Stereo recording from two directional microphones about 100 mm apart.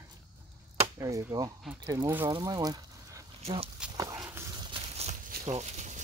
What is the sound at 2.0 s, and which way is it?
Speech, 25° right (ahead or behind).